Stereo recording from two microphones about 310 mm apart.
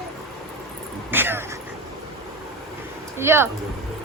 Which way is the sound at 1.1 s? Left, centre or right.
Centre.